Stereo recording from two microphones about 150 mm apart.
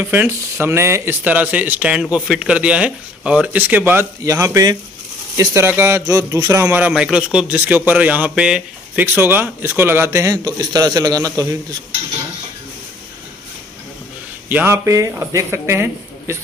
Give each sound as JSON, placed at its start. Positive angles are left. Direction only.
{"t": 0.0, "sound": "a man's voice", "side_deg": -15}
{"t": 14.5, "sound": "a man's voice", "side_deg": -15}